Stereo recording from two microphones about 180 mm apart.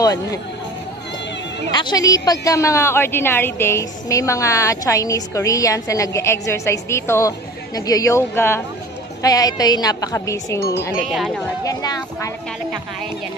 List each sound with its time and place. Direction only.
0.0 s a woman's voice: 20° left (ahead or behind)
1.7 s a woman's voice: 25° left (ahead or behind)
11.1 s speech: centre (ahead or behind)
11.6 s a woman's voice: 20° left (ahead or behind)